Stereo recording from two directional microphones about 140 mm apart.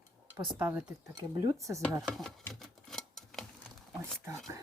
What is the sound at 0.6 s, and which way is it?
Speech, 10° right (ahead or behind).